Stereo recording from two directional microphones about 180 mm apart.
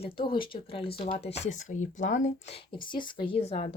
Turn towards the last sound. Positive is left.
turn(degrees=35)  # may be behind; listen again after turning